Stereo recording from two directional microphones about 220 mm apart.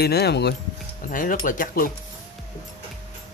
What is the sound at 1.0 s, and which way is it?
Speech, 35° left (ahead or behind).